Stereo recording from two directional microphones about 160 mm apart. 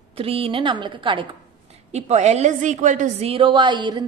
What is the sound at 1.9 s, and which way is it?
A woman's voice, 45° right (ahead or behind).